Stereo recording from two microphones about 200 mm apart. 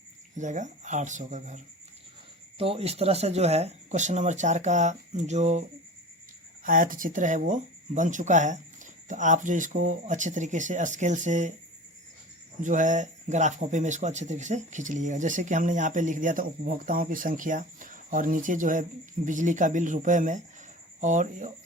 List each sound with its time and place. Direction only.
0.3 s speech: 40° right (ahead or behind)
6.7 s speech: 40° right (ahead or behind)
12.6 s speech: 40° right (ahead or behind)